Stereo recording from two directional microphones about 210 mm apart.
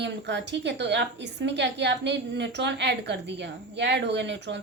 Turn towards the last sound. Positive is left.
turn(degrees=-55)  # may be behind; listen again after turning